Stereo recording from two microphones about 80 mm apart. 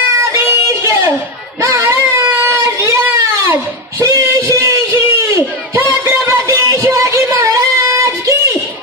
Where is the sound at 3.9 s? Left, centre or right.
Right.